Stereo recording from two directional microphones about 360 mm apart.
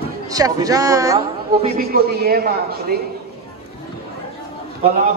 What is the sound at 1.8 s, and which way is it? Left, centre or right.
A woman's voice, right.